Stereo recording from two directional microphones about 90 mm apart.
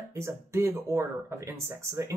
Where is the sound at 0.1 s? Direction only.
30° right (ahead or behind).